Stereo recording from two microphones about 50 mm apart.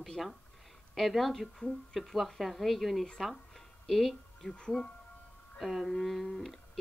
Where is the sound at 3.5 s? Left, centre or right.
Centre.